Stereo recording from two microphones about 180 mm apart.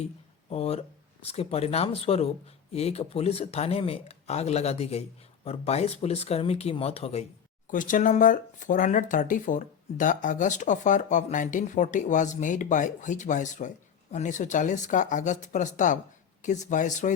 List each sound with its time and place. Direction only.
0.5 s speech: 35° left (ahead or behind)
7.7 s speech: 45° left (ahead or behind)